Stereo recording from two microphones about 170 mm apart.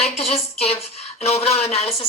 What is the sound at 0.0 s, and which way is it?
Speech, 40° left (ahead or behind).